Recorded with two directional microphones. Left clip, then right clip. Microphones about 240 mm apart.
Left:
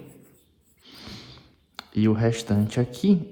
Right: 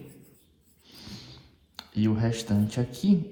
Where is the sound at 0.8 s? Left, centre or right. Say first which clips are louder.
Left 3 dB; left.